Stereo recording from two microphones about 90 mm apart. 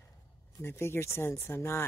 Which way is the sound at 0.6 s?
30° left (ahead or behind).